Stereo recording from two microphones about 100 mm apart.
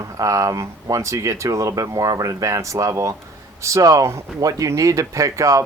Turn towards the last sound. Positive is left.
turn(degrees=-35)  # may be behind; listen again after turning